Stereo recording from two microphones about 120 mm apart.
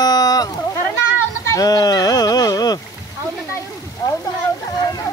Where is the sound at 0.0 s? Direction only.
35° left (ahead or behind).